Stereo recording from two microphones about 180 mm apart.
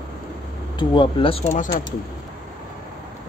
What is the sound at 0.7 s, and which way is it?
Speech, 30° left (ahead or behind).